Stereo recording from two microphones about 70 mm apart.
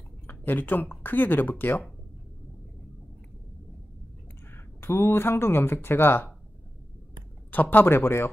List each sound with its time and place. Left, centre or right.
0.3 s speech: left
4.5 s speech: left
7.5 s a man's voice: left